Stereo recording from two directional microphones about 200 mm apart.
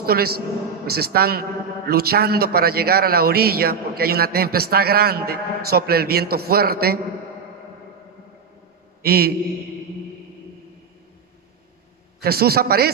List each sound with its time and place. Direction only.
0.0 s a man's voice: 50° right (ahead or behind)
9.0 s mantra: 50° right (ahead or behind)
12.2 s a man's voice: 50° right (ahead or behind)